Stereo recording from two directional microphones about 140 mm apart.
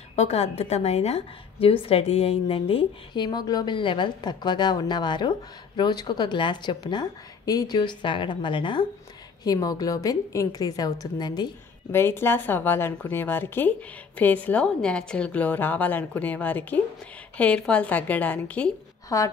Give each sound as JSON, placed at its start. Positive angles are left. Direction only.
{"t": 0.1, "sound": "a woman's voice", "side_deg": 50}
{"t": 3.2, "sound": "a woman's voice", "side_deg": 30}
{"t": 11.9, "sound": "a woman's voice", "side_deg": 15}
{"t": 19.0, "sound": "a woman's voice", "side_deg": 25}